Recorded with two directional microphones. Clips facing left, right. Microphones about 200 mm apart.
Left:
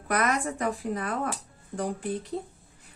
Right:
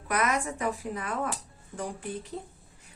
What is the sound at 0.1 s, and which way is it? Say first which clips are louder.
Speech: left 2 dB; 35° left (ahead or behind).